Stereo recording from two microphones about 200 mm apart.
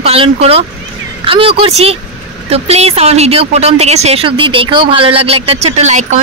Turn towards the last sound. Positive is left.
turn(degrees=-35)  # may be behind; listen again after turning